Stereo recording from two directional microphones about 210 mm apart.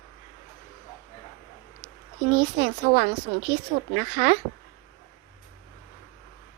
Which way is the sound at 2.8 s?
45° right (ahead or behind).